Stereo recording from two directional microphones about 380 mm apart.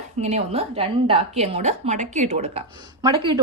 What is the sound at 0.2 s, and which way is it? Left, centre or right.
A woman's voice, centre.